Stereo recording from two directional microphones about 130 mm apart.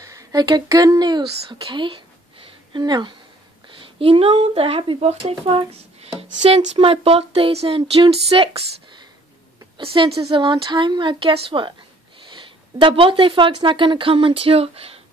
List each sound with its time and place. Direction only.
0.0 s speech: 25° right (ahead or behind); by 15.0 s 50° right (ahead or behind)